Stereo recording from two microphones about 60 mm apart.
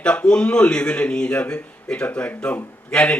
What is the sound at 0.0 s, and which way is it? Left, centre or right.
A man's voice, centre.